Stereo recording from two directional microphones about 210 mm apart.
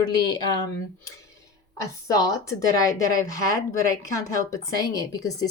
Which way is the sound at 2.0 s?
15° left (ahead or behind).